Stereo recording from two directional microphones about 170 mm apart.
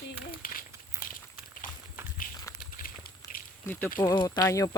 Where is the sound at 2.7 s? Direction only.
55° left (ahead or behind).